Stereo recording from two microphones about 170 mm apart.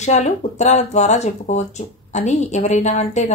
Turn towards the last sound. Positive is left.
turn(degrees=45)  # may be behind; listen again after turning